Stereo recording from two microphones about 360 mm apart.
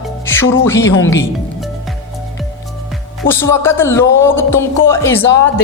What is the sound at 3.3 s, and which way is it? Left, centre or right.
A man's voice, centre.